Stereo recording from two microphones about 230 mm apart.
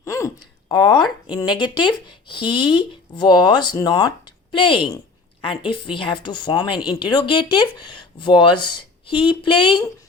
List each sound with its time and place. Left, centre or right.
0.0 s a woman's voice: centre